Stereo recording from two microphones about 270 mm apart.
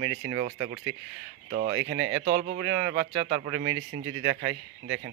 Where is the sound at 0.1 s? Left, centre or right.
Right.